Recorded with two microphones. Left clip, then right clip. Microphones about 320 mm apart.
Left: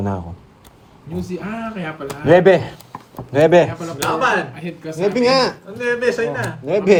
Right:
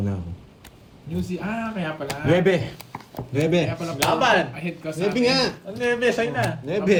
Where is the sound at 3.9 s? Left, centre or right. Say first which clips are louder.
Left 2 dB; centre.